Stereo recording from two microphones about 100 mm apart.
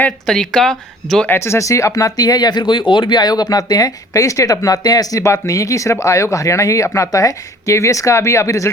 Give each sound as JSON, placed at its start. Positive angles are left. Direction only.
{"t": 0.3, "sound": "speech", "side_deg": 5}
{"t": 1.3, "sound": "speech", "side_deg": 25}